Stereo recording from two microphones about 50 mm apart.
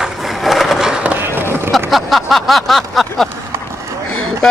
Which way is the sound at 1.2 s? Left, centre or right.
Right.